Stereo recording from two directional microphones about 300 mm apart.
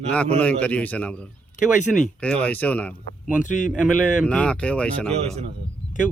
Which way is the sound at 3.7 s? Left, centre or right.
Centre.